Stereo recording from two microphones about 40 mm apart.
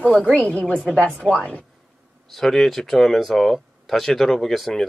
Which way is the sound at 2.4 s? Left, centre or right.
Centre.